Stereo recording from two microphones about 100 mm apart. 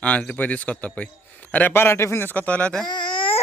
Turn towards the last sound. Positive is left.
turn(degrees=50)  # may be behind; listen again after turning